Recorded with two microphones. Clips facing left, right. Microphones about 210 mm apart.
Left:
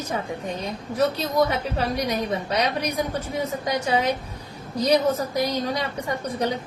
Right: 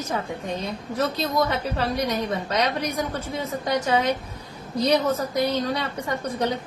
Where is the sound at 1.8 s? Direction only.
15° left (ahead or behind).